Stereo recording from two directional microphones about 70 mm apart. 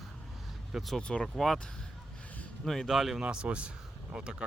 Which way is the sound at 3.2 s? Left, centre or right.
Centre.